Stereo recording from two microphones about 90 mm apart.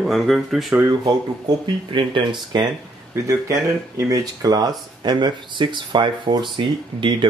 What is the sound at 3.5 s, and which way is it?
Speech, 40° right (ahead or behind).